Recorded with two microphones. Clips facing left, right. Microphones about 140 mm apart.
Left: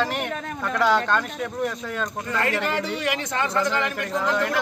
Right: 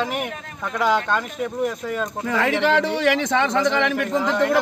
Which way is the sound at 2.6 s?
85° right.